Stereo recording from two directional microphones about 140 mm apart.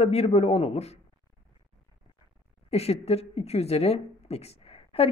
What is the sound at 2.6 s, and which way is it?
A woman's voice, 45° left (ahead or behind).